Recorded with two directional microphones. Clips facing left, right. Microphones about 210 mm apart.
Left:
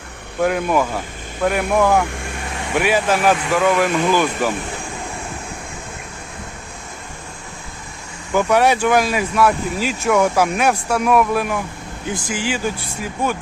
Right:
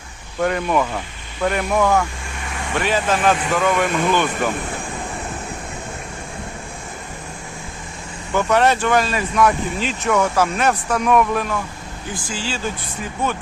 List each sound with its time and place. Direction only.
0.4 s speech: 5° left (ahead or behind)
8.3 s speech: 10° left (ahead or behind)